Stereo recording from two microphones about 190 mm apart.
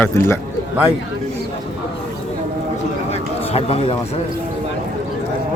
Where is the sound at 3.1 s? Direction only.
30° left (ahead or behind).